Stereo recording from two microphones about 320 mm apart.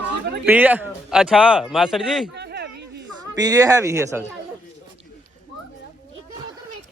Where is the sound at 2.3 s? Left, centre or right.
Right.